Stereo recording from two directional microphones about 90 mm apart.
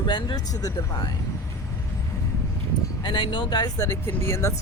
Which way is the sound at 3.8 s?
30° left (ahead or behind).